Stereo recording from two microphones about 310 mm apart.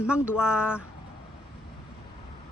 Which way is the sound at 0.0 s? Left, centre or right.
Centre.